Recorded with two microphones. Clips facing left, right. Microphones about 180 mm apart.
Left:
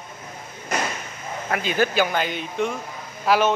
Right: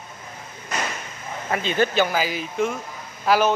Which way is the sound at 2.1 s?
5° right (ahead or behind).